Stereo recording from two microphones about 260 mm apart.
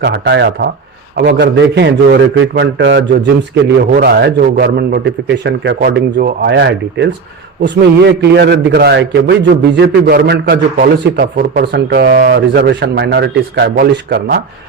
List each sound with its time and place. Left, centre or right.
0.0 s a man's voice: right